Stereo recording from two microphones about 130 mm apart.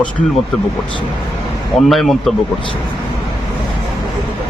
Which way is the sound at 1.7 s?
Centre (ahead or behind).